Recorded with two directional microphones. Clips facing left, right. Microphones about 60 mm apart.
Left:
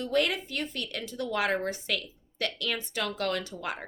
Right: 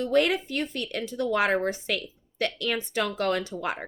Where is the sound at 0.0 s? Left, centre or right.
Right.